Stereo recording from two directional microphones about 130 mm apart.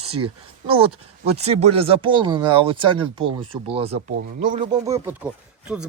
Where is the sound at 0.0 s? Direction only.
50° right (ahead or behind).